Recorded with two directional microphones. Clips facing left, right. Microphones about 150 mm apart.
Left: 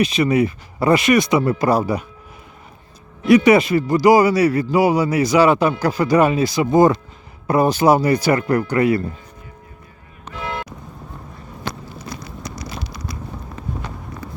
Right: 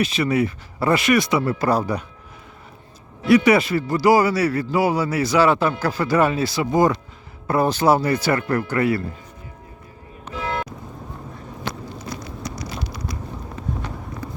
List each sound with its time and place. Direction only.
0.0 s speech: 20° left (ahead or behind)
3.2 s a man's voice: 20° left (ahead or behind)
7.4 s a man's voice: 15° left (ahead or behind)